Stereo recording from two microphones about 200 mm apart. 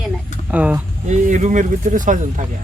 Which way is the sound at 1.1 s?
35° right (ahead or behind).